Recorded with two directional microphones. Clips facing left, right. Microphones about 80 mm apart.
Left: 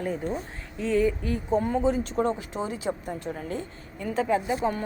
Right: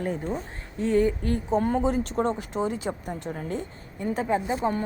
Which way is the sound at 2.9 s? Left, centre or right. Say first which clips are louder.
Left 1 dB; right.